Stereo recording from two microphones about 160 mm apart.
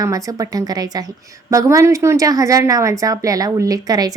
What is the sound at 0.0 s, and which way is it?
A woman's voice, 20° right (ahead or behind).